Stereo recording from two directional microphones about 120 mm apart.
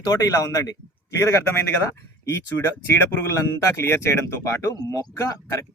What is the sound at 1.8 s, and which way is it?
Speech, 20° left (ahead or behind).